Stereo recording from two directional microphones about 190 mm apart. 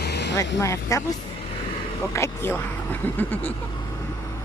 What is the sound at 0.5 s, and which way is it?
Speech, 15° left (ahead or behind).